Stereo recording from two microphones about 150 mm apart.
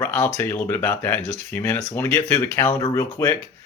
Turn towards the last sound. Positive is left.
turn(degrees=20)  # may be behind; listen again after turning